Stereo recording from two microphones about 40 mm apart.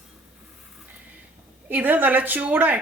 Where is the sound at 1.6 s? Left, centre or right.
Right.